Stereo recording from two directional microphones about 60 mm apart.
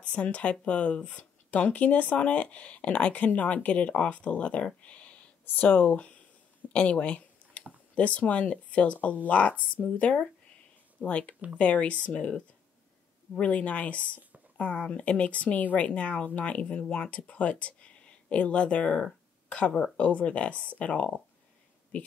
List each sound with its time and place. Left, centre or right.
0.0 s speech: left
6.7 s a sound: left
7.9 s speech: left